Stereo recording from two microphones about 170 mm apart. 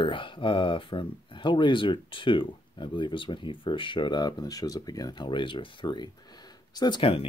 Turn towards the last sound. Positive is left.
turn(degrees=30)  # may be behind; listen again after turning